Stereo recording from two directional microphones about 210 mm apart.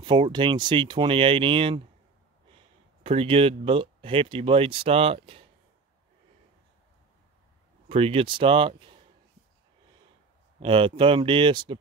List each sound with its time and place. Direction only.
0.0 s speech: 20° right (ahead or behind)
7.9 s speech: 25° right (ahead or behind)
10.6 s speech: 25° right (ahead or behind)